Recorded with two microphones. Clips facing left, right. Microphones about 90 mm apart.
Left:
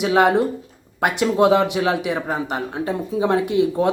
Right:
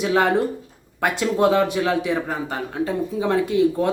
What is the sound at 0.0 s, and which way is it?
A man's voice, 20° left (ahead or behind).